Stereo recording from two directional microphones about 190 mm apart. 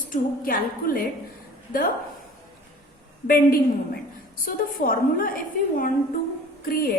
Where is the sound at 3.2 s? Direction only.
50° left (ahead or behind).